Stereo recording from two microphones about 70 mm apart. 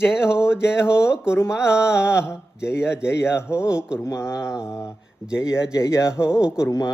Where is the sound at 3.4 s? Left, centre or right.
Centre.